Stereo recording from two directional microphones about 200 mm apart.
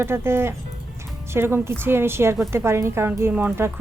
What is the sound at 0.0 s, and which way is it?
Speech, 10° right (ahead or behind).